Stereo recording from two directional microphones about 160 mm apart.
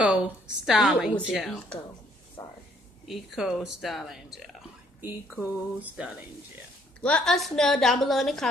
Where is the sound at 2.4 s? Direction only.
15° left (ahead or behind).